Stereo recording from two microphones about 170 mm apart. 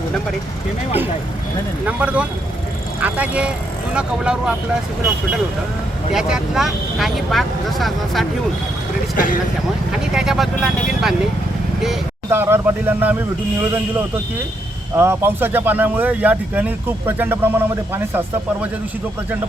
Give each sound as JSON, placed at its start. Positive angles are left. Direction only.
{"t": 1.9, "sound": "speech", "side_deg": -10}
{"t": 6.1, "sound": "speech", "side_deg": -5}
{"t": 9.1, "sound": "speech", "side_deg": 50}
{"t": 10.2, "sound": "speech", "side_deg": 0}
{"t": 12.3, "sound": "speech", "side_deg": -15}
{"t": 14.9, "sound": "speech", "side_deg": -15}